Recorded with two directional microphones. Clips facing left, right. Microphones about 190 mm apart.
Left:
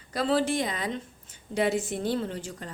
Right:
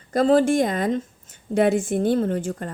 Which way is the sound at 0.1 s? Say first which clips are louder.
Right 8 dB; 45° right (ahead or behind).